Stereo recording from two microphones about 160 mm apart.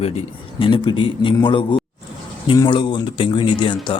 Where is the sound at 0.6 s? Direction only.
30° left (ahead or behind).